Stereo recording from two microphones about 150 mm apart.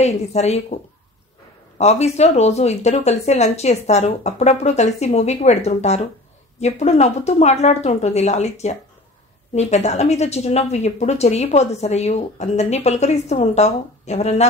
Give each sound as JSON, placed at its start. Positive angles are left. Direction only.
{"t": 0.0, "sound": "speech", "side_deg": 45}
{"t": 1.8, "sound": "speech", "side_deg": 45}